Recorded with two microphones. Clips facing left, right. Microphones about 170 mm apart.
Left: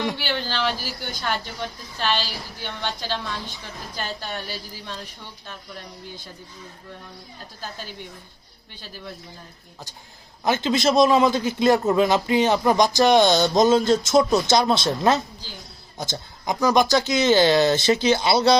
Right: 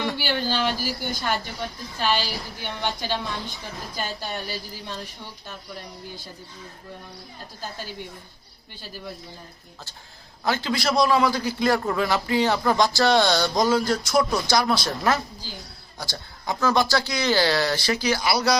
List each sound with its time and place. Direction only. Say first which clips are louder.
0.2 s a woman's voice: right 1 dB; 10° right (ahead or behind)
2.0 s a woman's voice: right 1 dB; 10° right (ahead or behind)
10.4 s a man's voice: left 4 dB; 20° left (ahead or behind)